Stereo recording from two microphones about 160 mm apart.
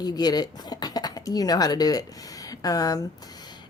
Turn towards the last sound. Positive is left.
turn(degrees=25)  # may be behind; listen again after turning